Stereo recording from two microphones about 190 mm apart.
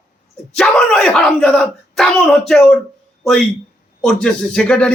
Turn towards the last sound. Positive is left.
turn(degrees=5)  # may be behind; listen again after turning